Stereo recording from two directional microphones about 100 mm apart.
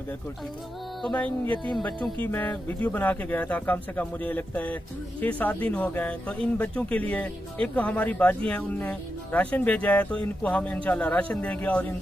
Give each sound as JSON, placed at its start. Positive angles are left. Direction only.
{"t": 1.0, "sound": "speech", "side_deg": 15}